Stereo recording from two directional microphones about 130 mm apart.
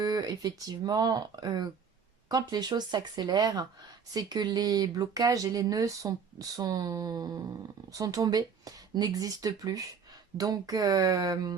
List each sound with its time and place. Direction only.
0.0 s speech: 30° right (ahead or behind)